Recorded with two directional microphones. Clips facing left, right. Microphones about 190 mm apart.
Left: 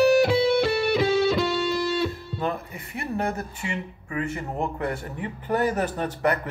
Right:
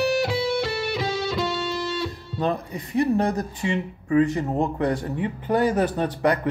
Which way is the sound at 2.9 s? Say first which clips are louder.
Right 7 dB; 15° right (ahead or behind).